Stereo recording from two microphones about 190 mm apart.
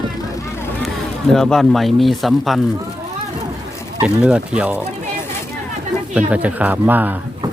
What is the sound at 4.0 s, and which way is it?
Speech, 5° right (ahead or behind).